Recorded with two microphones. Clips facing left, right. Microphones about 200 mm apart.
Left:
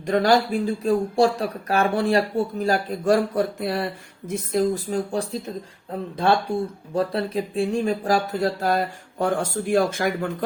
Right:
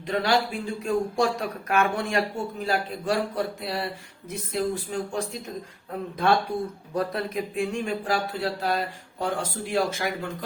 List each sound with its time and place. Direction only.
0.0 s speech: 45° left (ahead or behind)
4.3 s speech: 40° left (ahead or behind)